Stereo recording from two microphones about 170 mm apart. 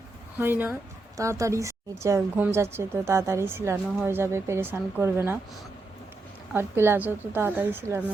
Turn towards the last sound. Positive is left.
turn(degrees=-15)  # may be behind; listen again after turning